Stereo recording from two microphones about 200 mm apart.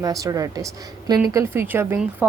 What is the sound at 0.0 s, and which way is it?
A woman's voice, 15° right (ahead or behind).